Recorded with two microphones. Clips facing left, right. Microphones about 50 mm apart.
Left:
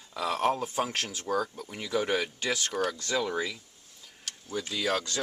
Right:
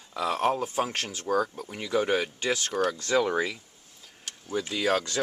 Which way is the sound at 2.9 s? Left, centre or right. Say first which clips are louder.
Right 5 dB; right.